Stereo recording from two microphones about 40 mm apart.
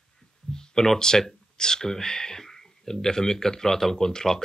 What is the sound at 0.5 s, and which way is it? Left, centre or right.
Speech, centre.